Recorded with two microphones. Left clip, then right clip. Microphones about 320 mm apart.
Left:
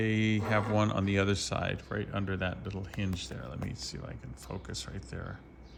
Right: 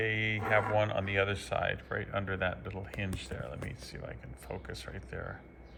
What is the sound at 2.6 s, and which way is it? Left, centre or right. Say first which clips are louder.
Speech: even; centre.